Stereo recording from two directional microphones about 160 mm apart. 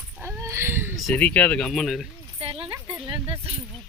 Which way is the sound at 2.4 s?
35° right (ahead or behind).